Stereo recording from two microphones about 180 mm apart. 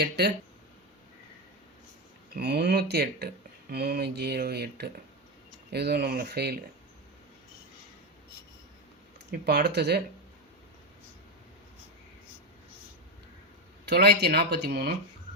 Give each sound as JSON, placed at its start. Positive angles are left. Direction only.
{"t": 0.0, "sound": "speech", "side_deg": -65}
{"t": 2.4, "sound": "speech", "side_deg": -65}
{"t": 9.3, "sound": "speech", "side_deg": -65}
{"t": 13.8, "sound": "speech", "side_deg": -65}